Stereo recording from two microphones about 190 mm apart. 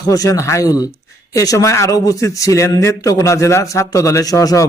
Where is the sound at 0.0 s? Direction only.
20° left (ahead or behind).